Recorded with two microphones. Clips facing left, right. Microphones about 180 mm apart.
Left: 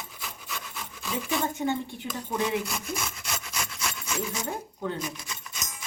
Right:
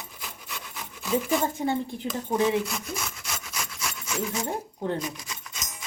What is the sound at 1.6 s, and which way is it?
Speech, 35° right (ahead or behind).